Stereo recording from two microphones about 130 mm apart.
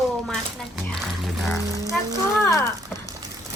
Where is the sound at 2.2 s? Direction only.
25° left (ahead or behind).